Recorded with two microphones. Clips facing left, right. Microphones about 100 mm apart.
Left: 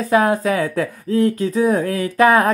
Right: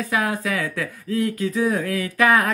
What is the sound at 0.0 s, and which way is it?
Speech, 30° left (ahead or behind).